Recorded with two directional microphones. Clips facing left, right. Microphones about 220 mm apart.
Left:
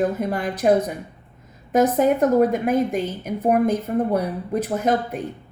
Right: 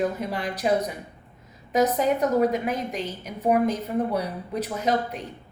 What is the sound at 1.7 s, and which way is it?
A woman's voice, 50° left (ahead or behind).